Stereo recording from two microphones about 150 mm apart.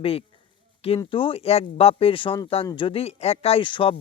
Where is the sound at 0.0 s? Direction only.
40° left (ahead or behind).